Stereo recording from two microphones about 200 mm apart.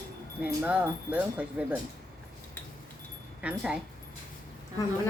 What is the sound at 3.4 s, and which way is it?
Speech, 5° right (ahead or behind).